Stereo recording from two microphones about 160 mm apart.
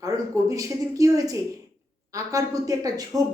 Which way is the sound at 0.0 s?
20° right (ahead or behind).